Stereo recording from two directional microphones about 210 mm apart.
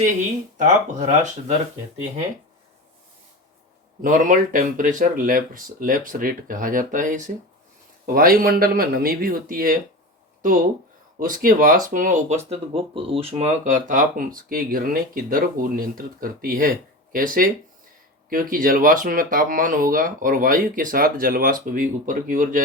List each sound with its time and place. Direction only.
0.6 s speech: 35° right (ahead or behind)
4.0 s speech: 40° right (ahead or behind)
11.2 s speech: 40° right (ahead or behind)
12.5 s speech: 25° right (ahead or behind)